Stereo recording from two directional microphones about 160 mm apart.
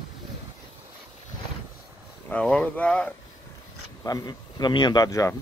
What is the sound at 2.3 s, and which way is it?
Speech, 5° left (ahead or behind).